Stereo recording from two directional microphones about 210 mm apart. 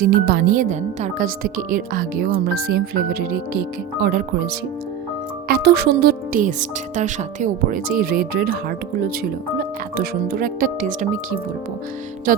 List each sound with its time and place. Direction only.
0.0 s speech: 45° right (ahead or behind)
5.5 s speech: 45° right (ahead or behind)
9.6 s speech: 45° right (ahead or behind)